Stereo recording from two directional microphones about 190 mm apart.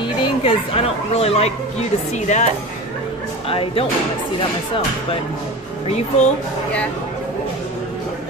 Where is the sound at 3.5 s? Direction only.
30° left (ahead or behind).